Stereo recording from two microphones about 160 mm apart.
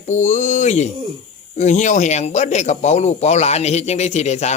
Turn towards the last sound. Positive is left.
turn(degrees=45)  # may be behind; listen again after turning